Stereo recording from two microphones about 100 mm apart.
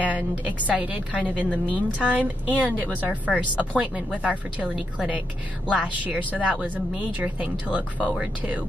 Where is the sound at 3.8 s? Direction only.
15° right (ahead or behind).